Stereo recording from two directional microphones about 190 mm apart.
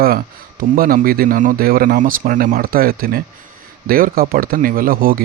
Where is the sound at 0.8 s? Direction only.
50° right (ahead or behind).